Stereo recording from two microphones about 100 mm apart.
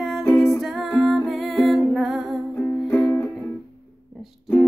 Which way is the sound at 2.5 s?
20° left (ahead or behind).